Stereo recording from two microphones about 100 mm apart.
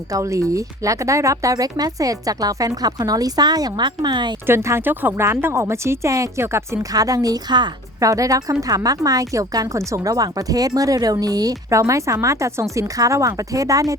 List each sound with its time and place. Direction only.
0.1 s speech: 30° right (ahead or behind); by 4.3 s 45° right (ahead or behind)
4.4 s a woman's voice: 25° right (ahead or behind)